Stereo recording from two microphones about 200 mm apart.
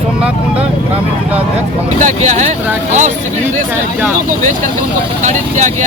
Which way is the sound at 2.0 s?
35° right (ahead or behind).